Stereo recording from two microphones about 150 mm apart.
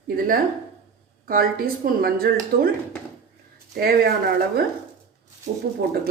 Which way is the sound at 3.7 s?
90° right.